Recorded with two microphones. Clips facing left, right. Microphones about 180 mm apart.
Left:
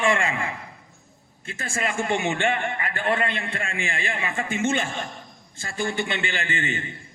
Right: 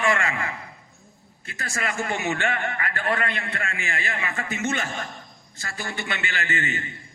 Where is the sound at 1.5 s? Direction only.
30° left (ahead or behind).